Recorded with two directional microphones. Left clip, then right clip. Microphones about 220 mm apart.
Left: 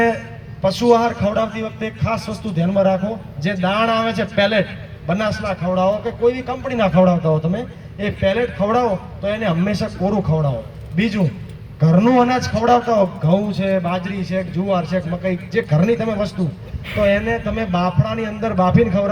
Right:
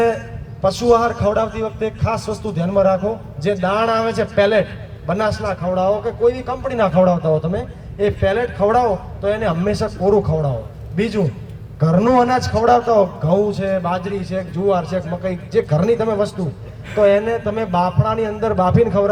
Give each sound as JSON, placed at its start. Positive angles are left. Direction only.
{"t": 0.6, "sound": "a man's voice", "side_deg": -20}